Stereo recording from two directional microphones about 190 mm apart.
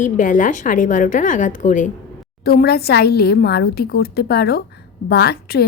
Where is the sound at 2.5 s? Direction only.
55° left (ahead or behind).